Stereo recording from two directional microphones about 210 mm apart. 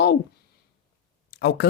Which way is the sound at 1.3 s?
55° left (ahead or behind).